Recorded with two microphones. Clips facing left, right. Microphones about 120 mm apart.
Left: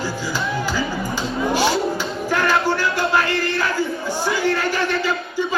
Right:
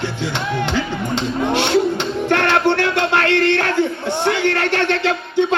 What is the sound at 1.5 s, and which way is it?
Speech, 70° right (ahead or behind).